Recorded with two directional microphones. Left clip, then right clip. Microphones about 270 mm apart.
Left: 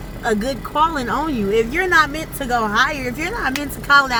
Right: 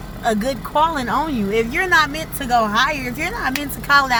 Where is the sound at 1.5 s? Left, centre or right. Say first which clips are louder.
Left 1 dB; centre.